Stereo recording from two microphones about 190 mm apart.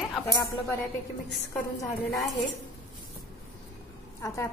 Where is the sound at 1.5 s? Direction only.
15° left (ahead or behind).